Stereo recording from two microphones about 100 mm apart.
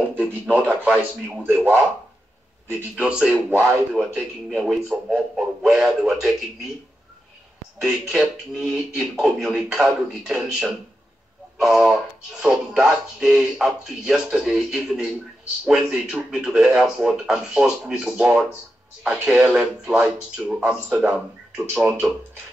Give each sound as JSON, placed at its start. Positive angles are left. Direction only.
{"t": 0.1, "sound": "speech", "side_deg": -20}
{"t": 3.0, "sound": "speech", "side_deg": -10}
{"t": 7.8, "sound": "speech", "side_deg": -5}